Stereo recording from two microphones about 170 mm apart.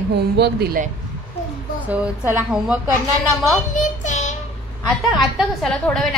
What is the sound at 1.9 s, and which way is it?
Speech, 10° right (ahead or behind).